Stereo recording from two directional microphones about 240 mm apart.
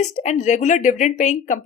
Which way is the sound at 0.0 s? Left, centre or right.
Left.